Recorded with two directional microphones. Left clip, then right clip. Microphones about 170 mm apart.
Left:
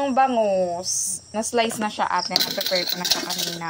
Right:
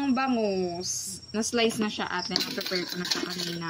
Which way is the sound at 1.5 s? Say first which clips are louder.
Left 4 dB; 10° right (ahead or behind).